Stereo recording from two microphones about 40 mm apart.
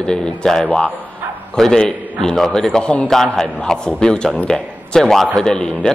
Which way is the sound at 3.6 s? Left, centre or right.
Centre.